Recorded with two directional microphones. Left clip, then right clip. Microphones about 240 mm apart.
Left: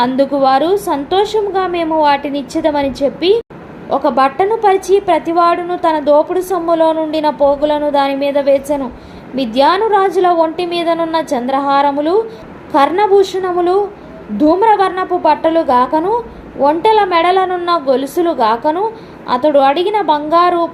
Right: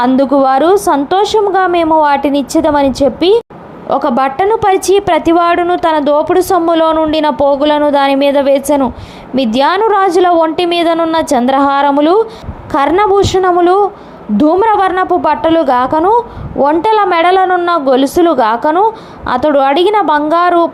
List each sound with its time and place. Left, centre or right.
0.0 s a woman's voice: right